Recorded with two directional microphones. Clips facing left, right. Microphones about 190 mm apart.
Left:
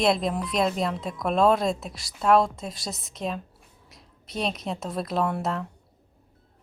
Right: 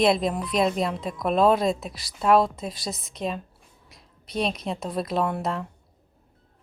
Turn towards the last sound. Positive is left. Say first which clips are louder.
# even
turn(degrees=0)  # may be behind; listen again after turning